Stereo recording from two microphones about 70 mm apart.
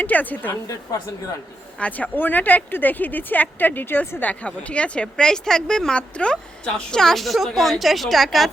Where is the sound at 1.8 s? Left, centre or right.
Left.